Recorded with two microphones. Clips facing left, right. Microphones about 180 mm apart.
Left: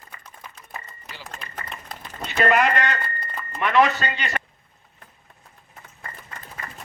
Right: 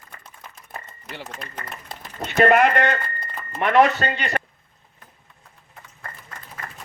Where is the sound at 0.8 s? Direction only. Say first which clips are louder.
Right 5 dB; 60° right (ahead or behind).